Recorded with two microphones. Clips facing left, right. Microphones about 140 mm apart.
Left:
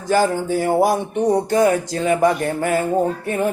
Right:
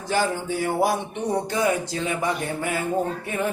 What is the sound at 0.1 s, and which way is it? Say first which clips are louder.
Music: left 7 dB; 45° left (ahead or behind).